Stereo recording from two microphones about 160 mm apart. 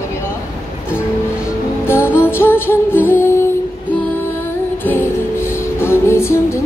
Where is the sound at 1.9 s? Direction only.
15° left (ahead or behind).